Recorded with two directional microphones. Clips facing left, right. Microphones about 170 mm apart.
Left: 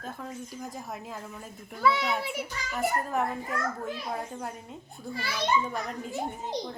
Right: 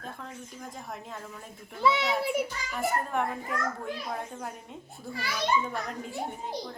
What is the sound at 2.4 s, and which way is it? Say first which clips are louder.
A woman's voice: even; centre (ahead or behind).